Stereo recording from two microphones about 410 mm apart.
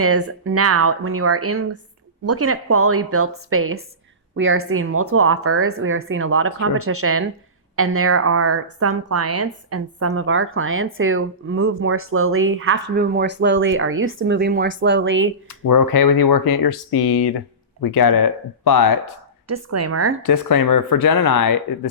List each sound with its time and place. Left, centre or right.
0.0 s a woman's voice: right
15.4 s speech: left
19.5 s a woman's voice: right
20.2 s speech: left